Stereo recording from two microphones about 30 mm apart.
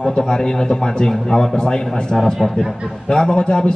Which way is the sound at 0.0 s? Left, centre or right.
Left.